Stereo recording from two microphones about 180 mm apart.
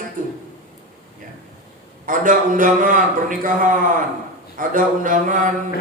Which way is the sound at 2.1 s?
50° right (ahead or behind).